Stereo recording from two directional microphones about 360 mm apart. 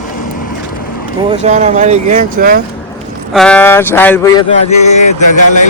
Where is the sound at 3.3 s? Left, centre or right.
Centre.